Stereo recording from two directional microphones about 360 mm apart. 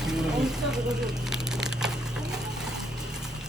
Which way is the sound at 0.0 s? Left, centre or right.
Centre.